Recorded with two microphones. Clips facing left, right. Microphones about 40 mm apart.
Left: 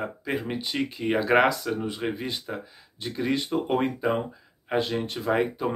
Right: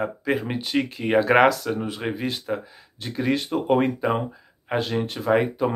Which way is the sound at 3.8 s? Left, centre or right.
Centre.